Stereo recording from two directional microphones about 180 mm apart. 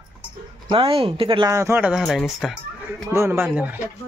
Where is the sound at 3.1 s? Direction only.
15° right (ahead or behind).